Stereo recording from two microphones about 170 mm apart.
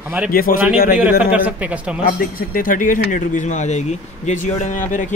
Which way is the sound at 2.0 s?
55° left (ahead or behind).